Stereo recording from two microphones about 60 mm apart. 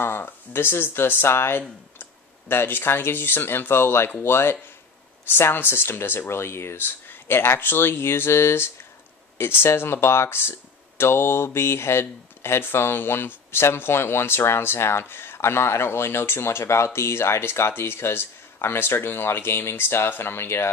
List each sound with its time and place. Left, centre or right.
0.0 s speech: left